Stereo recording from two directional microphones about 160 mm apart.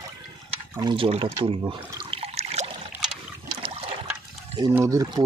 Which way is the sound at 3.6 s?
35° right (ahead or behind).